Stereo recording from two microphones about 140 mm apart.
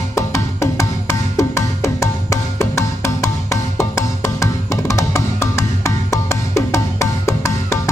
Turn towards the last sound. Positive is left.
turn(degrees=20)  # may be behind; listen again after turning